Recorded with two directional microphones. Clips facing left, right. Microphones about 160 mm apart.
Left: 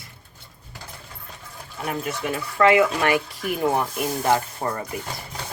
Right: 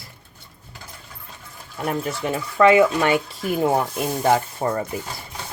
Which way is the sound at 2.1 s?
25° right (ahead or behind).